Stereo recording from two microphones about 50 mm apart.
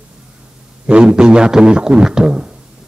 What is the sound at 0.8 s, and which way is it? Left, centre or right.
A man's voice, centre.